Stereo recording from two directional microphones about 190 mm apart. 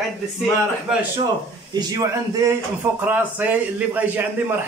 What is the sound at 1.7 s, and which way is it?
Speech, 20° right (ahead or behind).